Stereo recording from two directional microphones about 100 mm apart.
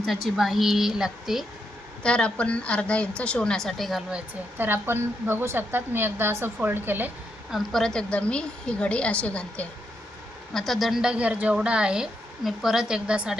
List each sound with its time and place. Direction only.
0.1 s speech: centre (ahead or behind)
2.0 s a woman's voice: 10° left (ahead or behind)
4.5 s a woman's voice: 20° right (ahead or behind)
7.5 s a woman's voice: 5° left (ahead or behind)
10.5 s a woman's voice: centre (ahead or behind)